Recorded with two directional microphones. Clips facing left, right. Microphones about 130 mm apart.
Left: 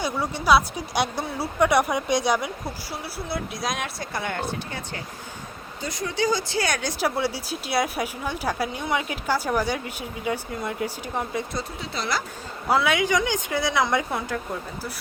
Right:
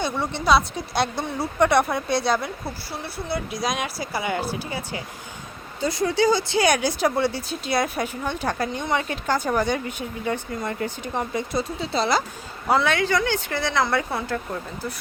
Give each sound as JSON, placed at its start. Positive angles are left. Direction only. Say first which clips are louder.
{"t": 0.0, "sound": "speech", "louder": "right 1 dB", "side_deg": 10}
{"t": 3.0, "sound": "speech", "louder": "right 3 dB", "side_deg": 0}
{"t": 5.8, "sound": "speech", "louder": "right 6 dB", "side_deg": -30}
{"t": 7.0, "sound": "speech", "louder": "right 3 dB", "side_deg": 10}
{"t": 11.9, "sound": "speech", "louder": "right 6 dB", "side_deg": -25}
{"t": 12.6, "sound": "speech", "louder": "right 1 dB", "side_deg": 5}